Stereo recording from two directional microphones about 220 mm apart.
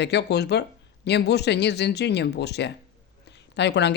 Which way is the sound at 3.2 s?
50° left (ahead or behind).